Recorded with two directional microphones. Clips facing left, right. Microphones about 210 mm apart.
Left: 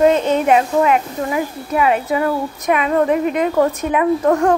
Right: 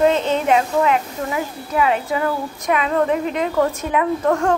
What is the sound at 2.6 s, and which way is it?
A woman's voice, 15° left (ahead or behind).